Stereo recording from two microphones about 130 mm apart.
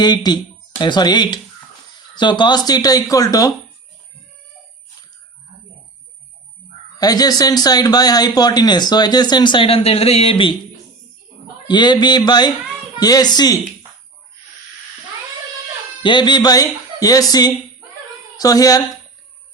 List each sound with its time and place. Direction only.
0.0 s speech: 35° left (ahead or behind)
7.0 s speech: 30° left (ahead or behind)
11.7 s a woman's voice: 35° left (ahead or behind)
16.0 s a woman's voice: 35° left (ahead or behind)